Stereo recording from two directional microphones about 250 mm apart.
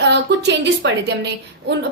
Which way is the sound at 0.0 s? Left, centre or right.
Right.